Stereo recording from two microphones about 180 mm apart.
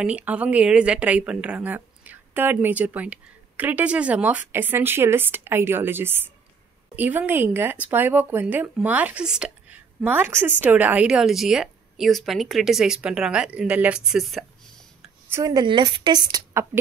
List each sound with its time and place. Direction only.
0.0 s speech: 5° right (ahead or behind)
15.3 s a woman's voice: 20° right (ahead or behind)